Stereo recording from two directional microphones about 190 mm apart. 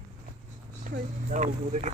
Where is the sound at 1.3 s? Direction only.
40° right (ahead or behind).